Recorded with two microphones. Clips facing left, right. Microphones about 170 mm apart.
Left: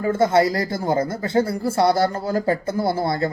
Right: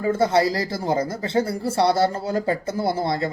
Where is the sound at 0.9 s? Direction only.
25° left (ahead or behind).